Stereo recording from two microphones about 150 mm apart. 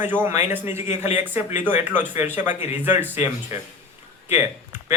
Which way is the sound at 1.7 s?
10° right (ahead or behind).